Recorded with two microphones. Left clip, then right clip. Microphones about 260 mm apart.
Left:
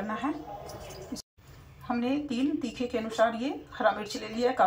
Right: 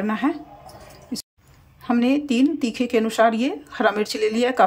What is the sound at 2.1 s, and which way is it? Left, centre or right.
Speech, right.